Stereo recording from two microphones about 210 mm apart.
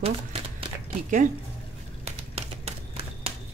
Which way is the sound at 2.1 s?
30° right (ahead or behind).